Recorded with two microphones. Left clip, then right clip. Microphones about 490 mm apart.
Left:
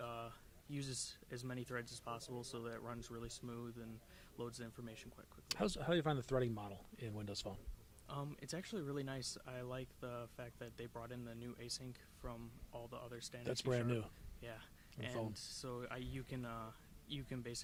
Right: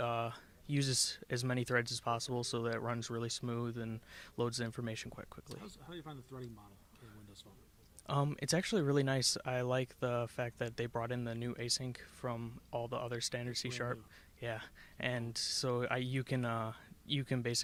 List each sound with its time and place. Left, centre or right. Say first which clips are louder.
0.0 s speech: right 11 dB; right
5.5 s speech: left 12 dB; left
8.0 s speech: right 12 dB; right